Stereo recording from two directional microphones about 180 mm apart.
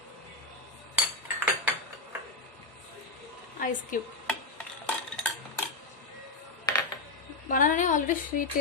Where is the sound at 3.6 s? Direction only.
50° left (ahead or behind).